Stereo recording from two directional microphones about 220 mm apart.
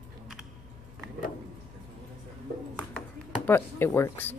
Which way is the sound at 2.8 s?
5° left (ahead or behind).